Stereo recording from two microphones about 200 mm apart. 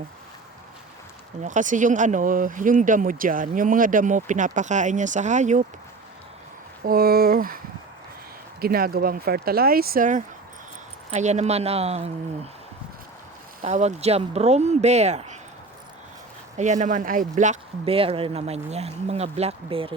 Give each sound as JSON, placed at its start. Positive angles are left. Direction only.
{"t": 1.4, "sound": "speech", "side_deg": -40}
{"t": 6.8, "sound": "speech", "side_deg": -50}
{"t": 8.6, "sound": "speech", "side_deg": -50}
{"t": 13.6, "sound": "speech", "side_deg": -35}
{"t": 16.6, "sound": "speech", "side_deg": -35}